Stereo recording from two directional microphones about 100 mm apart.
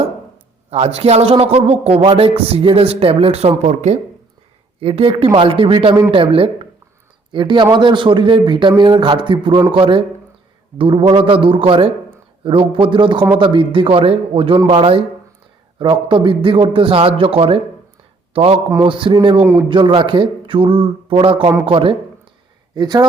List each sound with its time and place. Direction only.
0.7 s a man's voice: 85° right
2.1 s speech: 70° right (ahead or behind)
4.8 s a man's voice: 70° right (ahead or behind)
7.3 s a man's voice: 50° right (ahead or behind); by 15.0 s 70° right (ahead or behind)
15.8 s a man's voice: 60° right (ahead or behind)
19.4 s a man's voice: 20° right (ahead or behind)
19.6 s a man's voice: 55° right (ahead or behind)
22.7 s speech: 45° right (ahead or behind)